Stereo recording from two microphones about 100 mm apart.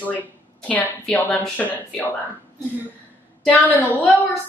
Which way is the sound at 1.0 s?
5° left (ahead or behind).